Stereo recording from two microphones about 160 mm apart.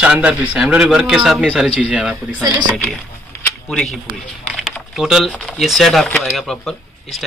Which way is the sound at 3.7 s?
5° left (ahead or behind).